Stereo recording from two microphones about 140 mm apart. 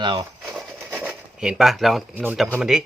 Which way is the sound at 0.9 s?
10° right (ahead or behind).